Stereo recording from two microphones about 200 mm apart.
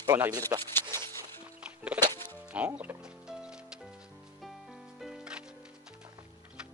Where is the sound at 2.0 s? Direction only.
10° left (ahead or behind).